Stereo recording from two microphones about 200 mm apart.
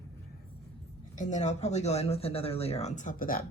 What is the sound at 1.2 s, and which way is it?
Speech, 35° left (ahead or behind).